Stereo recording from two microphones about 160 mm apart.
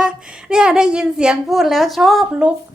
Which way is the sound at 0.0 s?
5° right (ahead or behind).